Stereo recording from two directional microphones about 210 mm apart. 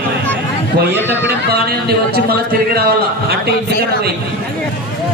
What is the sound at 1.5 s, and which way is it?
A man's voice, 50° right (ahead or behind).